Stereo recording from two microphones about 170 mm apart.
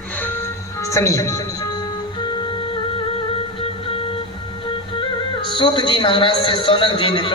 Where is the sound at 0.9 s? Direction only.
20° left (ahead or behind).